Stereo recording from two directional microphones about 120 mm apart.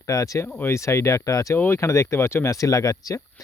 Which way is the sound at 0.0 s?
30° left (ahead or behind).